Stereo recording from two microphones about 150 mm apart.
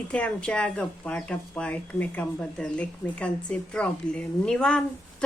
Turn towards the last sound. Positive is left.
turn(degrees=5)  # may be behind; listen again after turning